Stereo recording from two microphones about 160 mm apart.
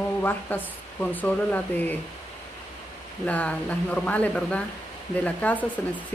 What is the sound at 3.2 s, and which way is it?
Speech, 10° left (ahead or behind).